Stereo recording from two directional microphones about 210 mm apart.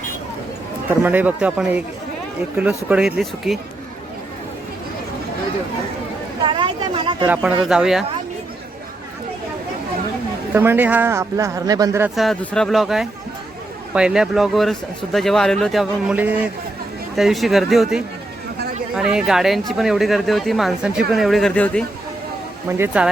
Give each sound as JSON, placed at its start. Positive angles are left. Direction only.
{"t": 0.9, "sound": "a man's voice", "side_deg": -10}
{"t": 6.4, "sound": "speech", "side_deg": -25}
{"t": 7.3, "sound": "speech", "side_deg": -5}
{"t": 10.5, "sound": "a man's voice", "side_deg": -10}
{"t": 12.1, "sound": "speech", "side_deg": 0}
{"t": 23.0, "sound": "speech", "side_deg": -5}